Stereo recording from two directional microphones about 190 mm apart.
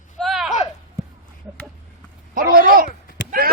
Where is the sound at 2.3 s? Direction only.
45° right (ahead or behind).